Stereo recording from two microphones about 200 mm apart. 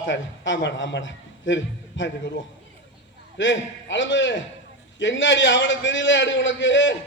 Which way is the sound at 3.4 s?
70° left (ahead or behind).